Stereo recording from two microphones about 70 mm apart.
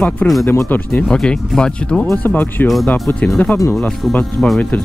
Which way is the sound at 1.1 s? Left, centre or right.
Centre.